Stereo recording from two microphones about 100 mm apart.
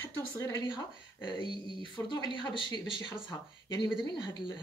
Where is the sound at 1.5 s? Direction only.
50° left (ahead or behind).